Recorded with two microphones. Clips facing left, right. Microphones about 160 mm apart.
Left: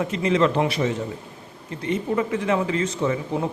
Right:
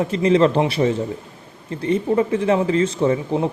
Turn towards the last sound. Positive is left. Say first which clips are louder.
# right 5 dB
turn(degrees=-30)  # may be behind; listen again after turning